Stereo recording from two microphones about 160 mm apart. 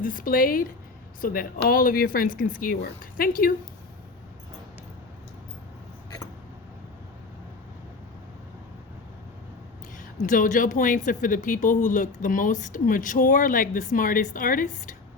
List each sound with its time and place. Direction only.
0.0 s speech: 60° left (ahead or behind)
10.2 s speech: 55° left (ahead or behind)